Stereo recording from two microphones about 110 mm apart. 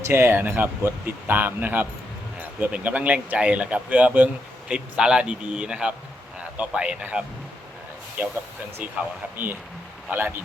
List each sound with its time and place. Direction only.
0.0 s speech: 20° right (ahead or behind)
10.1 s speech: 15° right (ahead or behind)